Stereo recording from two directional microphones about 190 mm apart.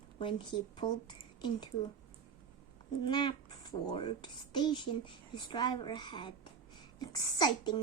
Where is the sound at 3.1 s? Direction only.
25° left (ahead or behind).